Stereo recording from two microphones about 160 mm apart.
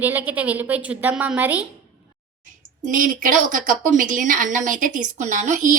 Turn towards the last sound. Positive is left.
turn(degrees=-50)  # may be behind; listen again after turning